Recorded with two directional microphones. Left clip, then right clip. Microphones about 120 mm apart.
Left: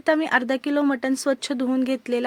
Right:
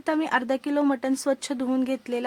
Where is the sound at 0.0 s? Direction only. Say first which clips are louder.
Left 4 dB; 25° left (ahead or behind).